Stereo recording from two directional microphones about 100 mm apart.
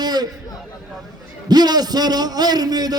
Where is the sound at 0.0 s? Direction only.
45° right (ahead or behind).